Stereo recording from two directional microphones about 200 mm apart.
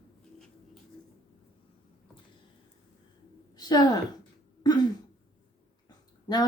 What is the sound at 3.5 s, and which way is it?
Speech, 20° left (ahead or behind).